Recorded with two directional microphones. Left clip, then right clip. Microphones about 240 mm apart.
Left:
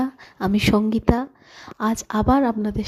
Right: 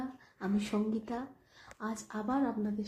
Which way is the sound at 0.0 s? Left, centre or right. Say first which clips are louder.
Left 15 dB; left.